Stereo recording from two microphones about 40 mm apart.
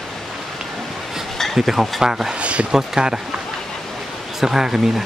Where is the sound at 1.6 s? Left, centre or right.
Centre.